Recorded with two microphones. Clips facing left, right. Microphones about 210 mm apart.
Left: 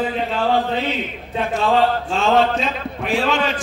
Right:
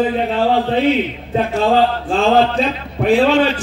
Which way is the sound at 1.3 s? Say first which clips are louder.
Right 4 dB; 35° right (ahead or behind).